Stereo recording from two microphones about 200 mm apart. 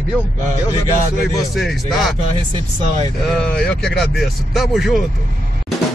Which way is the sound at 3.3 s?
5° left (ahead or behind).